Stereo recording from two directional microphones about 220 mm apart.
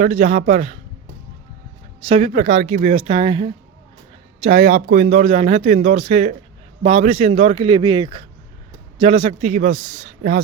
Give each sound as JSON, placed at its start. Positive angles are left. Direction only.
{"t": 0.0, "sound": "speech", "side_deg": -30}
{"t": 2.0, "sound": "a man's voice", "side_deg": -25}